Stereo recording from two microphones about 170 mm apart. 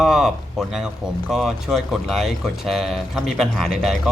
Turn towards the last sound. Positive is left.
turn(degrees=0)  # may be behind; listen again after turning